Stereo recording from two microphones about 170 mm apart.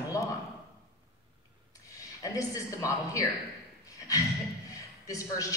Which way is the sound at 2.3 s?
20° left (ahead or behind).